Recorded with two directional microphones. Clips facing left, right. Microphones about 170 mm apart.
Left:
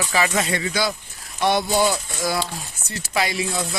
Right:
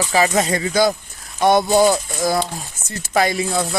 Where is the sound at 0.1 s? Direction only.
40° right (ahead or behind).